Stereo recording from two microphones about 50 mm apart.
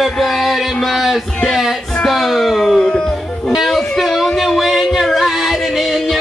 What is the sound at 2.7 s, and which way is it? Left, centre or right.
Music, centre.